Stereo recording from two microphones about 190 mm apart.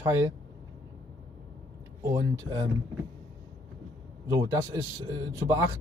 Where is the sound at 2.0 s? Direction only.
15° right (ahead or behind).